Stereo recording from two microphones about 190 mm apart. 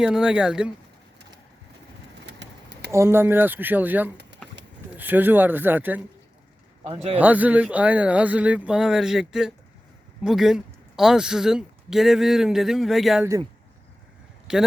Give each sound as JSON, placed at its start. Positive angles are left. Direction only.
{"t": 0.0, "sound": "speech", "side_deg": -5}
{"t": 2.2, "sound": "bird", "side_deg": -65}
{"t": 2.9, "sound": "speech", "side_deg": -15}
{"t": 6.8, "sound": "a man's voice", "side_deg": -30}
{"t": 7.2, "sound": "speech", "side_deg": -10}
{"t": 14.5, "sound": "speech", "side_deg": -5}